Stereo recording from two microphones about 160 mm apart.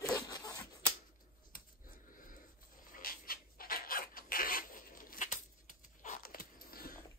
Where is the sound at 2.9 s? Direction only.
65° left (ahead or behind).